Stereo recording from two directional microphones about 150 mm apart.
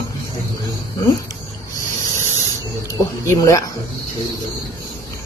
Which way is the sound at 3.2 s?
20° left (ahead or behind).